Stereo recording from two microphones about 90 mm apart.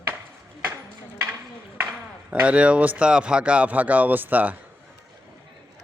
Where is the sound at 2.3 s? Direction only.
15° right (ahead or behind).